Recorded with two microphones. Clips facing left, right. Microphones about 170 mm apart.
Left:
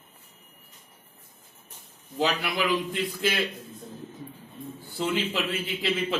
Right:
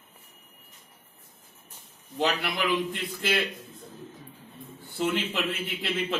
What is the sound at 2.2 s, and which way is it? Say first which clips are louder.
Speech: left 1 dB; centre (ahead or behind).